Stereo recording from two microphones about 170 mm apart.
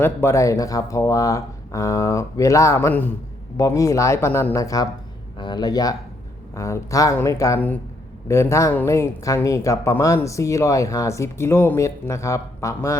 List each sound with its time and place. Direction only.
0.0 s speech: 15° left (ahead or behind)